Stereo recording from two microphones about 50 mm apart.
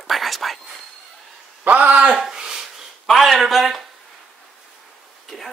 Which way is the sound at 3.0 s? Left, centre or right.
Centre.